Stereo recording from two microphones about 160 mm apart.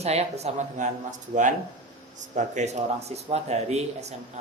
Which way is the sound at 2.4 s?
50° right (ahead or behind).